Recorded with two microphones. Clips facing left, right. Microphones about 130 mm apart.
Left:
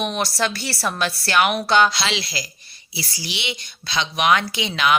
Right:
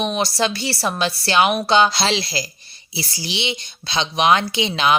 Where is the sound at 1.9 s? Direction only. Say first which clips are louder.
Right 4 dB; 35° right (ahead or behind).